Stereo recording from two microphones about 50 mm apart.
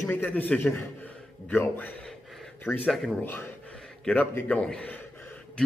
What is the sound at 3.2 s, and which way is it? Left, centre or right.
Speech, left.